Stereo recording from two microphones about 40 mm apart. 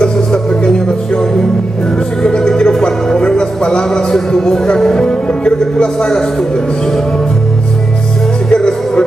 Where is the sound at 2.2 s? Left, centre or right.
Centre.